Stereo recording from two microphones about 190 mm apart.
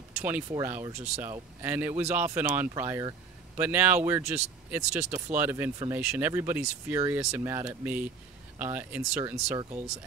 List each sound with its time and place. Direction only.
0.2 s speech: 15° right (ahead or behind)